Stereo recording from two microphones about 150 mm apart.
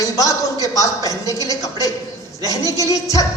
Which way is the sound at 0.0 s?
20° left (ahead or behind).